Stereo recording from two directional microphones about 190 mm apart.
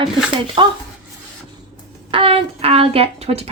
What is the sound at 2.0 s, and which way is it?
Speech, 25° right (ahead or behind).